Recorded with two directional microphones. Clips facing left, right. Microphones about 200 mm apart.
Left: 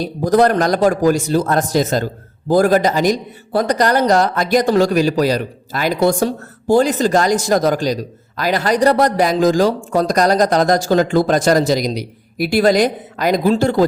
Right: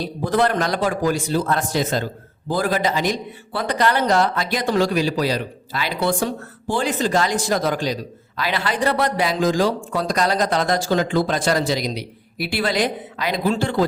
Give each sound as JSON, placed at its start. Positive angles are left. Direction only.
{"t": 0.0, "sound": "speech", "side_deg": 45}